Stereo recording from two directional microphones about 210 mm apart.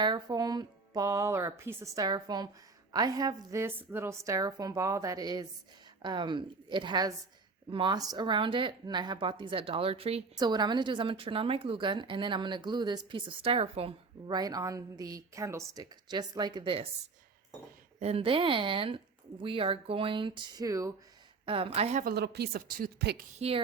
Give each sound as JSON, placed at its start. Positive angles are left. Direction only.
{"t": 0.0, "sound": "a woman's voice", "side_deg": -20}
{"t": 18.0, "sound": "speech", "side_deg": -25}
{"t": 22.0, "sound": "a woman's voice", "side_deg": -50}